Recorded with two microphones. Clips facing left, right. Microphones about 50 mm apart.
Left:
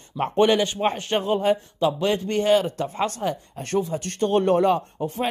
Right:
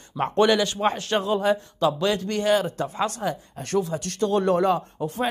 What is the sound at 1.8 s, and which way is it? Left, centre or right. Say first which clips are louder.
Speech: even; left.